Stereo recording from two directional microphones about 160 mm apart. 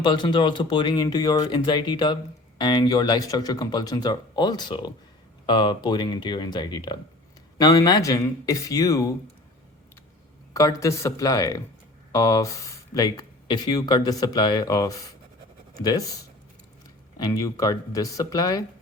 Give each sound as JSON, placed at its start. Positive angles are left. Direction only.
{"t": 0.0, "sound": "speech", "side_deg": 30}
{"t": 10.5, "sound": "speech", "side_deg": 20}
{"t": 17.2, "sound": "speech", "side_deg": 25}